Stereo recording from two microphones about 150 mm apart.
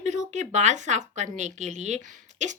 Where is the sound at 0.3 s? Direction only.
50° right (ahead or behind).